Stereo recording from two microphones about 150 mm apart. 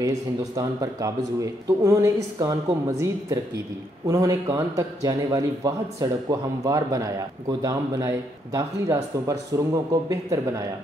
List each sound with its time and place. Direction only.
0.6 s a man's voice: 25° right (ahead or behind)